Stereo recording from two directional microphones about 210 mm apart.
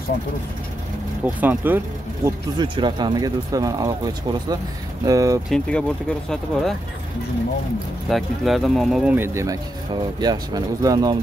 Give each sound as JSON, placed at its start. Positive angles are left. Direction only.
{"t": 1.2, "sound": "speech", "side_deg": -5}
{"t": 2.2, "sound": "speech", "side_deg": -20}
{"t": 5.5, "sound": "speech", "side_deg": 5}
{"t": 8.1, "sound": "speech", "side_deg": 0}